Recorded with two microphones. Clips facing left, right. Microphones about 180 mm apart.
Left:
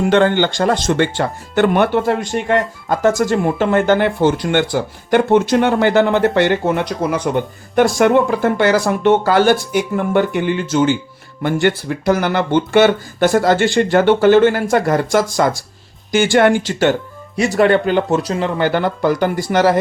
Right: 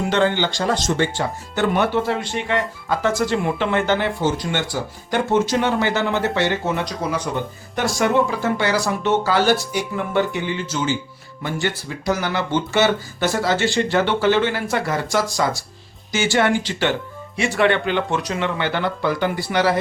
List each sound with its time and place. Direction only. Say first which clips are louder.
0.1 s speech: left 5 dB; 55° left (ahead or behind)